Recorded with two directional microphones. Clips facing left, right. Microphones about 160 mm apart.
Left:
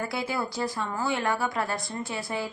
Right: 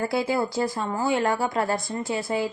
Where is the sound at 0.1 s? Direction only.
30° right (ahead or behind).